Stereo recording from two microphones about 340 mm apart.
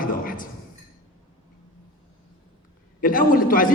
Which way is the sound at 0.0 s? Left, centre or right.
Left.